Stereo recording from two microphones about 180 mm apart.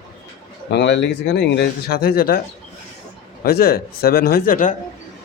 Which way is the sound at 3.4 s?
55° left (ahead or behind).